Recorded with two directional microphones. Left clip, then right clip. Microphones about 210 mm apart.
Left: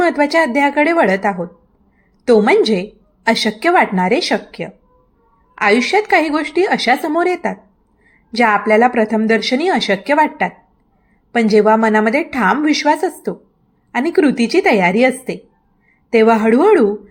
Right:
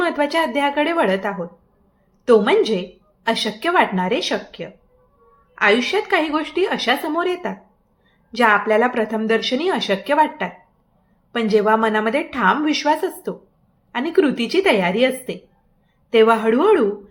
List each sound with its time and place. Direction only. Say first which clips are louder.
0.0 s a woman's voice: left 5 dB; 25° left (ahead or behind)
5.8 s a woman's voice: left 6 dB; 25° left (ahead or behind)